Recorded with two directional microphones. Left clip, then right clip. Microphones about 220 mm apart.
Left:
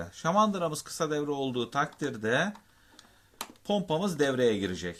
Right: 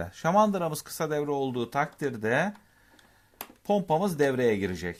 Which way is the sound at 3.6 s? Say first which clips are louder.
Right 4 dB; 35° right (ahead or behind).